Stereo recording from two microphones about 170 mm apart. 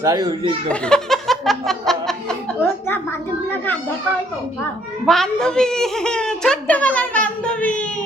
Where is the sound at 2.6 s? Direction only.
10° left (ahead or behind).